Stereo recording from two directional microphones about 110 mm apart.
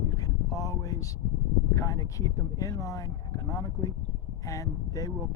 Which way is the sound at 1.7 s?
30° left (ahead or behind).